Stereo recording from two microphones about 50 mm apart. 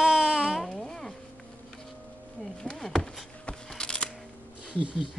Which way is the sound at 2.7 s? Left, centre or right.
Centre.